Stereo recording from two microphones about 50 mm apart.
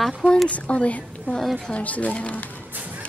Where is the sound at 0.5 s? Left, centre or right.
Left.